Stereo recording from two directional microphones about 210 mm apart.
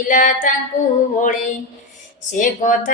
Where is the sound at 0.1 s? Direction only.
35° left (ahead or behind).